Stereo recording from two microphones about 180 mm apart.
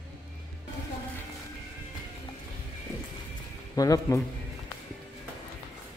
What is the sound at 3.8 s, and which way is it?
Speech, 20° left (ahead or behind).